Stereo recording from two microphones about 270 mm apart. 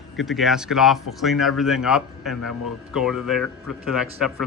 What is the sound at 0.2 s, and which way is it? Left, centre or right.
Speech, centre.